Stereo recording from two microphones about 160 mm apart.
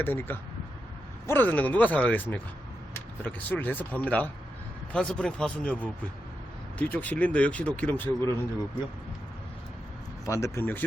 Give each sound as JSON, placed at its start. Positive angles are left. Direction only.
{"t": 0.0, "sound": "speech", "side_deg": 15}
{"t": 10.2, "sound": "speech", "side_deg": 20}